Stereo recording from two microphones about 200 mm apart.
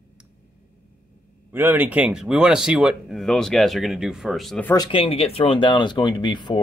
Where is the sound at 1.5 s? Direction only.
10° right (ahead or behind).